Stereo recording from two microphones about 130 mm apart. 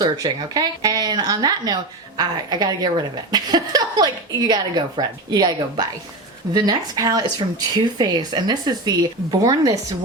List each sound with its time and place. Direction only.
0.0 s a woman's voice: 30° right (ahead or behind)